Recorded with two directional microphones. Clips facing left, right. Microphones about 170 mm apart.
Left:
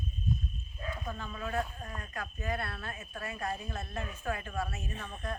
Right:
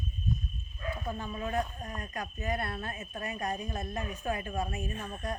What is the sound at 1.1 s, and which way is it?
Speech, 15° right (ahead or behind).